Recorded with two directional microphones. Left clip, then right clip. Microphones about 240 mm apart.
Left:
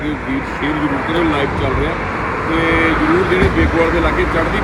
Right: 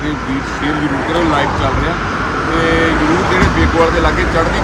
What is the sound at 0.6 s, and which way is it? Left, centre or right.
Speech, right.